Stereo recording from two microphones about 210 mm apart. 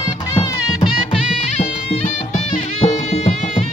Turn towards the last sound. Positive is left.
turn(degrees=30)  # may be behind; listen again after turning